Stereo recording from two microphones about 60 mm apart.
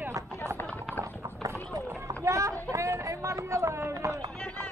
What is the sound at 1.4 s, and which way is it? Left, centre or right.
Clip-clop, right.